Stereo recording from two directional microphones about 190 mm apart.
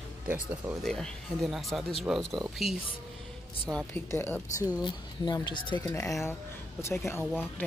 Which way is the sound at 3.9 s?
10° left (ahead or behind).